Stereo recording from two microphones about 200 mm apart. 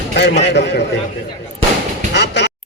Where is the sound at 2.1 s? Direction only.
60° left (ahead or behind).